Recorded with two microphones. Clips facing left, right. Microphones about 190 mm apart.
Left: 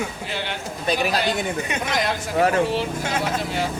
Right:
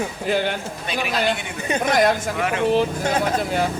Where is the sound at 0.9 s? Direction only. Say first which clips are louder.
Left 1 dB; 40° left (ahead or behind).